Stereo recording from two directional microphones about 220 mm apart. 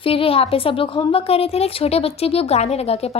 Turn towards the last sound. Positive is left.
turn(degrees=25)  # may be behind; listen again after turning